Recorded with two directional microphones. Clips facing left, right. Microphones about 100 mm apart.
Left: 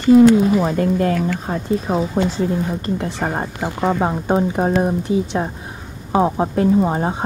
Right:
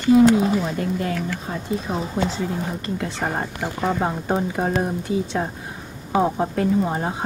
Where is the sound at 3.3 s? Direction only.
25° left (ahead or behind).